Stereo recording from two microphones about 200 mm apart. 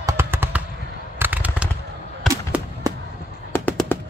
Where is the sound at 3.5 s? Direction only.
10° left (ahead or behind).